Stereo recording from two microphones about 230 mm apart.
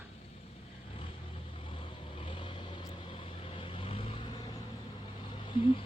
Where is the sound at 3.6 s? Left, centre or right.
Left.